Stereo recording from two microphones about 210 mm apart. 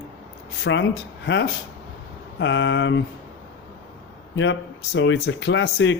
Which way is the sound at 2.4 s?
60° left (ahead or behind).